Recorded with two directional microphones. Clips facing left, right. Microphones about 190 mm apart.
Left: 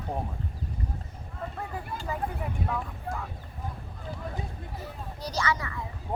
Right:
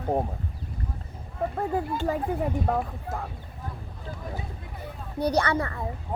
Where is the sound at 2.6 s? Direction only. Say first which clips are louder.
Right 5 dB; 45° right (ahead or behind).